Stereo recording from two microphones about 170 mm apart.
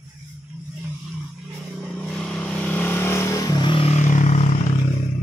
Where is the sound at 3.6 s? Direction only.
35° left (ahead or behind).